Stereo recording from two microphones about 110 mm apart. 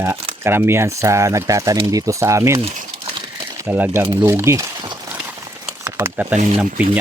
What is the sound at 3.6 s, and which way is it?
Speech, 20° right (ahead or behind).